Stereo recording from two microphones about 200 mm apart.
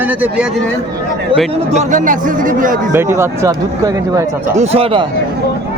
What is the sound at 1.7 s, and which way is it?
Speech, 35° right (ahead or behind).